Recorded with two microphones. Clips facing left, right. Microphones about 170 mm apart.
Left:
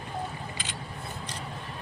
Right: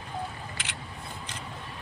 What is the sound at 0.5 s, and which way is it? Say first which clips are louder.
Single-lens reflex camera: left 2 dB; 75° right (ahead or behind).